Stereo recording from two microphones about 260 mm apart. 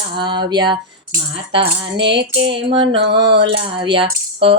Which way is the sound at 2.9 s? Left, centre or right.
Right.